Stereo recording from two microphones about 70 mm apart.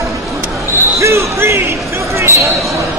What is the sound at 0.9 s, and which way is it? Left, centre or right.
Basketball bounce, right.